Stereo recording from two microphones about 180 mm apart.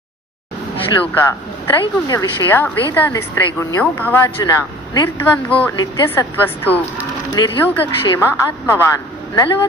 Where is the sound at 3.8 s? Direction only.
10° left (ahead or behind).